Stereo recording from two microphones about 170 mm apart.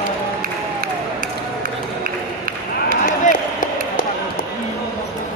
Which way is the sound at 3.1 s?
50° left (ahead or behind).